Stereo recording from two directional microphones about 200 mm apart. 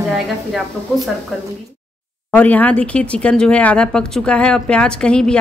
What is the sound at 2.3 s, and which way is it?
Speech, 5° left (ahead or behind).